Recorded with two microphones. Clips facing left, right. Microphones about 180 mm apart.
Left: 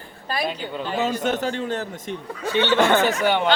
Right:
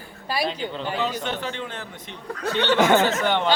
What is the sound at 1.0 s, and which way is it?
A man's voice, 45° left (ahead or behind).